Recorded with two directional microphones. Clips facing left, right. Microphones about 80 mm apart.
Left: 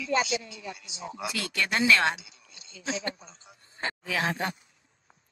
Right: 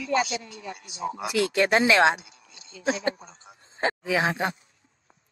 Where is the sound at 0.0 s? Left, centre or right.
Right.